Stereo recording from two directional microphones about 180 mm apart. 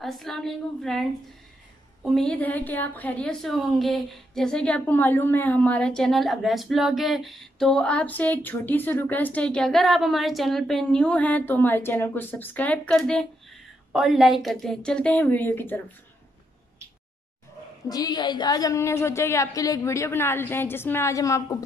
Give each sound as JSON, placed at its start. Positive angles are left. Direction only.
{"t": 0.0, "sound": "a woman's voice", "side_deg": 0}
{"t": 2.0, "sound": "a woman's voice", "side_deg": 5}
{"t": 17.8, "sound": "a woman's voice", "side_deg": 20}